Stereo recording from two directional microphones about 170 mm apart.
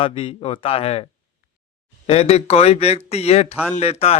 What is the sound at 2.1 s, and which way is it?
Speech, 40° left (ahead or behind).